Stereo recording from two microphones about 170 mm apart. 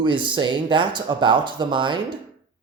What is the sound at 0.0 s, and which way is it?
Speech, 30° right (ahead or behind).